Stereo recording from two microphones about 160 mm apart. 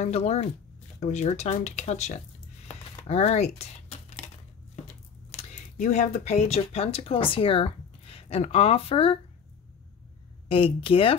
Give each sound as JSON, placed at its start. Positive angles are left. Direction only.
{"t": 0.0, "sound": "speech", "side_deg": 40}
{"t": 5.3, "sound": "speech", "side_deg": 45}
{"t": 10.5, "sound": "speech", "side_deg": 35}